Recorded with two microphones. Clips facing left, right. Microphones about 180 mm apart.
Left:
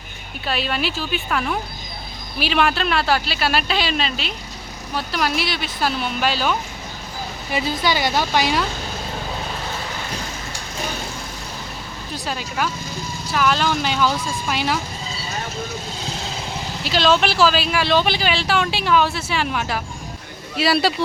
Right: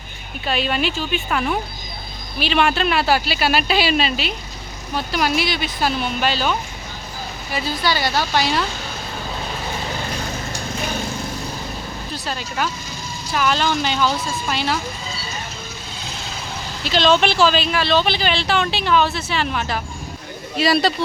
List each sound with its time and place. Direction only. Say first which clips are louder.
0.4 s speech: right 2 dB; centre (ahead or behind)
7.5 s speech: left 1 dB; 20° left (ahead or behind)
12.1 s speech: left 1 dB; 15° left (ahead or behind)
16.8 s speech: right 1 dB; 5° left (ahead or behind)